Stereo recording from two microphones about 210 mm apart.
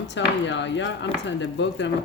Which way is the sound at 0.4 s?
60° left (ahead or behind).